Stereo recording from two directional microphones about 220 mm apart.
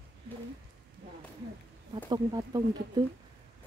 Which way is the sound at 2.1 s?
20° right (ahead or behind).